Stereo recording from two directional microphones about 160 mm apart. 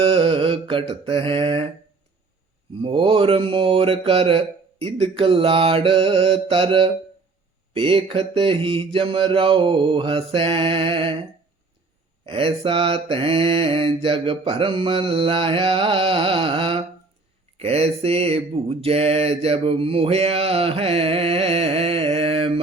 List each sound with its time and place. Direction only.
0.0 s mantra: 35° right (ahead or behind)
2.8 s mantra: 35° right (ahead or behind)
12.2 s mantra: 35° right (ahead or behind)